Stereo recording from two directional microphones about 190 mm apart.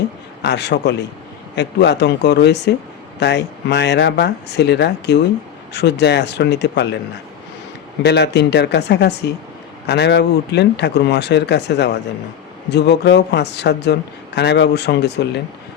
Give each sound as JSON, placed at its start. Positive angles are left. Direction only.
{"t": 0.4, "sound": "speech", "side_deg": 60}
{"t": 8.0, "sound": "speech", "side_deg": 60}